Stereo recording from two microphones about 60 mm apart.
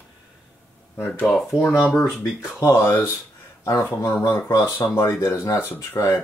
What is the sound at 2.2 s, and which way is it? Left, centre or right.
Speech, left.